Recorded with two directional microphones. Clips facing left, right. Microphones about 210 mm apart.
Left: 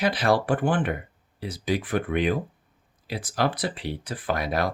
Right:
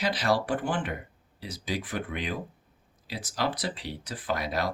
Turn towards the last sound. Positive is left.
turn(degrees=55)  # may be behind; listen again after turning